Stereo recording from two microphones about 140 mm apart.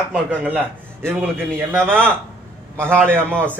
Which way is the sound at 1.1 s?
15° right (ahead or behind).